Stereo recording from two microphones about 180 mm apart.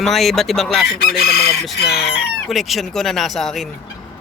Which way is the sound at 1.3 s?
60° left (ahead or behind).